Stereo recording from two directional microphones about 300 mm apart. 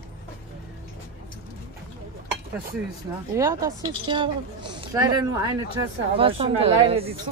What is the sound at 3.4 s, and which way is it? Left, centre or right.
A woman's voice, centre.